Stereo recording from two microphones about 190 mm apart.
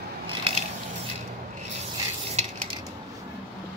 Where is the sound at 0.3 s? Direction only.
30° right (ahead or behind).